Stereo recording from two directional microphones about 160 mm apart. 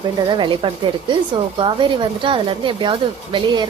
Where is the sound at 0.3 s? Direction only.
30° right (ahead or behind).